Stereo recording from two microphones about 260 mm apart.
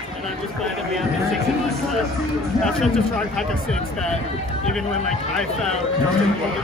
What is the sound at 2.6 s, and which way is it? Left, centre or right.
Speech, centre.